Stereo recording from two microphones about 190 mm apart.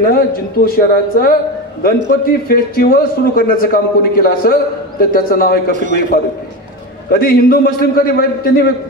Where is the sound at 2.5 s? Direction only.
50° left (ahead or behind).